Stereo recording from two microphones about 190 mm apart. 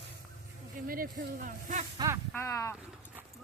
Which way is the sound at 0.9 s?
50° right (ahead or behind).